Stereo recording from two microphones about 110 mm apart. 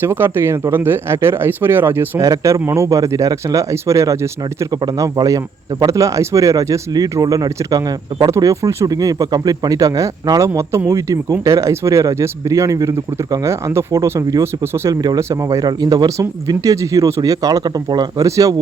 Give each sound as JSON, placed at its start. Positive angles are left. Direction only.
{"t": 0.0, "sound": "speech", "side_deg": -20}
{"t": 2.2, "sound": "speech", "side_deg": -30}